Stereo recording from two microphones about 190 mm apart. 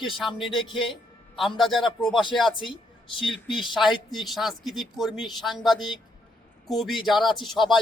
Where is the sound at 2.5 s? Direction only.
25° left (ahead or behind).